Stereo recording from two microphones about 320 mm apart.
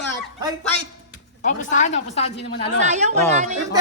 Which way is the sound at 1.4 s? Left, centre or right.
Left.